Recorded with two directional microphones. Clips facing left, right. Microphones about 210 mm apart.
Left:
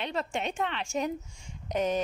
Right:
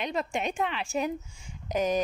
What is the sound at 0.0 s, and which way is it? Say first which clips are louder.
A woman's voice: right 2 dB; 10° right (ahead or behind).